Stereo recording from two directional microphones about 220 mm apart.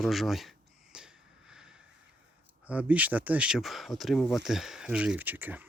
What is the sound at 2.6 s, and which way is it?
Speech, 5° right (ahead or behind).